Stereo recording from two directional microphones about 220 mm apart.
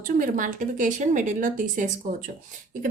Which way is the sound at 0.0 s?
40° right (ahead or behind).